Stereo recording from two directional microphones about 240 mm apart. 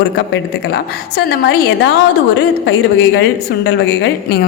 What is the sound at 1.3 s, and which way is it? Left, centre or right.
A woman's voice, left.